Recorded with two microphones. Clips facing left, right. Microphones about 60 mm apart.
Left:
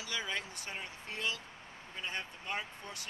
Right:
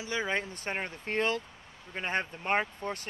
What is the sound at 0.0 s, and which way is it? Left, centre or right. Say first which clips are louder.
Speech: right 7 dB; right.